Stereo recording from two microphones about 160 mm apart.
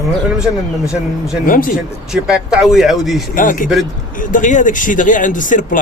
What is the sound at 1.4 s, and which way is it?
Speech, 60° left (ahead or behind).